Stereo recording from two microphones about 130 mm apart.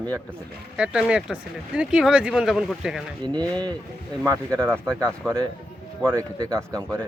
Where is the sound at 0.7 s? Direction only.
5° right (ahead or behind).